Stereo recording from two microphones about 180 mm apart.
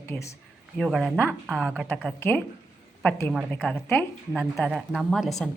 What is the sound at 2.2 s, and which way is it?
Speech, 10° left (ahead or behind).